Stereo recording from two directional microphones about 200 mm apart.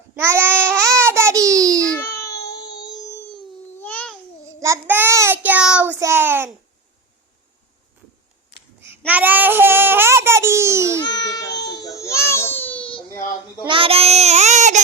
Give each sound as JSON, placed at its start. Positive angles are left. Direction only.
{"t": 0.2, "sound": "babbling", "side_deg": -10}
{"t": 1.0, "sound": "a sound", "side_deg": -15}
{"t": 1.8, "sound": "baby cry", "side_deg": 10}
{"t": 2.9, "sound": "a sound", "side_deg": 20}
{"t": 3.3, "sound": "babbling", "side_deg": 10}
{"t": 4.6, "sound": "child singing", "side_deg": -10}
{"t": 8.8, "sound": "babbling", "side_deg": -10}
{"t": 11.0, "sound": "baby cry", "side_deg": 20}
{"t": 12.8, "sound": "baby cry", "side_deg": 25}
{"t": 13.6, "sound": "child singing", "side_deg": -25}